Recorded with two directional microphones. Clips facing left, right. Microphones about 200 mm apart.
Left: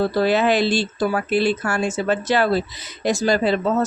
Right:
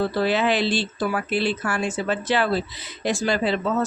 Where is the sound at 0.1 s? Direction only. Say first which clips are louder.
Left 4 dB; 40° left (ahead or behind).